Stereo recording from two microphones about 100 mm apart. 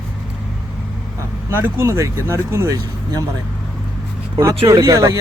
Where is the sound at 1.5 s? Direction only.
25° right (ahead or behind).